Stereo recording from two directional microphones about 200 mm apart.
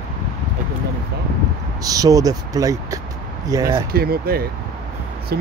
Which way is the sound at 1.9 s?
15° right (ahead or behind).